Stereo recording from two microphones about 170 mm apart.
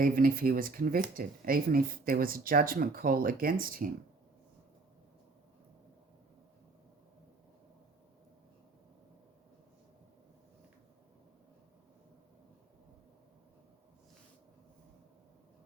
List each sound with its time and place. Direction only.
0.0 s speech: 55° right (ahead or behind)